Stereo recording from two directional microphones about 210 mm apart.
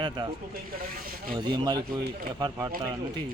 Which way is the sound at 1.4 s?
20° right (ahead or behind).